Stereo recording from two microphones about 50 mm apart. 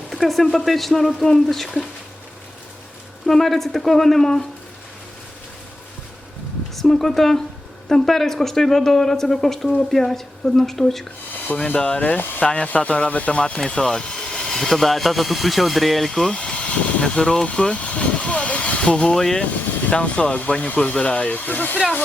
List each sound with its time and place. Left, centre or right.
0.3 s speech: centre
3.2 s speech: centre
6.7 s speech: centre
11.6 s speech: left
11.9 s speech: left
13.6 s speech: centre
16.2 s speech: centre
19.9 s speech: left